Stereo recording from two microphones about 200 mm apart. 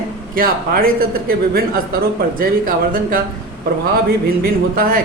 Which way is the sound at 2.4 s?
45° right (ahead or behind).